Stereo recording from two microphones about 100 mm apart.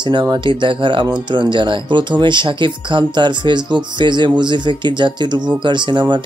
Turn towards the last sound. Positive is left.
turn(degrees=-50)  # may be behind; listen again after turning